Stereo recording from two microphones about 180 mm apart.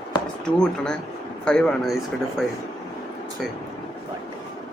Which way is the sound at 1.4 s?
5° left (ahead or behind).